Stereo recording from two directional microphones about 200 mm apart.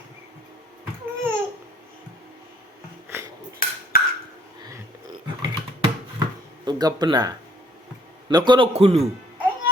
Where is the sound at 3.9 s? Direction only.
45° left (ahead or behind).